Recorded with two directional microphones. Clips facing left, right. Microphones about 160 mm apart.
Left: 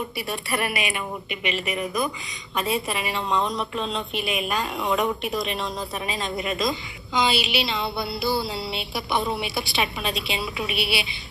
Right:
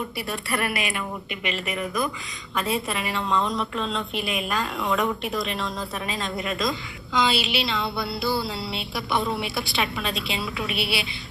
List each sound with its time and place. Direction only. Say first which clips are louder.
0.5 s a woman's voice: even; 5° left (ahead or behind)
2.6 s a woman's voice: left 1 dB; 5° left (ahead or behind)
3.2 s speech: even; 15° left (ahead or behind)
3.4 s a woman's voice: even; centre (ahead or behind)
4.9 s speech: left 1 dB; 15° left (ahead or behind)
5.5 s a woman's voice: left 1 dB; 5° left (ahead or behind)
6.3 s speech: left 2 dB; 15° left (ahead or behind)
6.6 s a woman's voice: left 1 dB; centre (ahead or behind)